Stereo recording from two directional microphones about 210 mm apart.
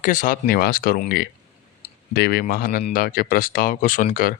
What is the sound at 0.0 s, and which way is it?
Speech, 40° left (ahead or behind).